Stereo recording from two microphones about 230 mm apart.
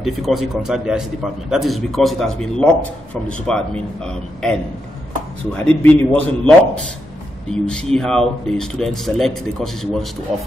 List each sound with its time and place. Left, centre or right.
0.0 s a man's voice: centre
5.7 s a man's voice: centre
7.5 s a man's voice: centre